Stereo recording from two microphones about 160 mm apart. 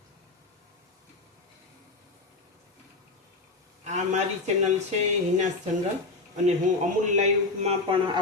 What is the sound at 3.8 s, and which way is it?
Speech, 45° right (ahead or behind).